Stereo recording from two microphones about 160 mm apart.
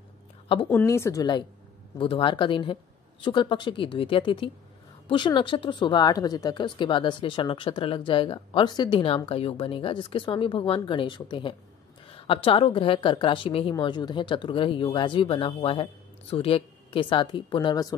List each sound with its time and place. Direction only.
0.7 s a woman's voice: 15° left (ahead or behind)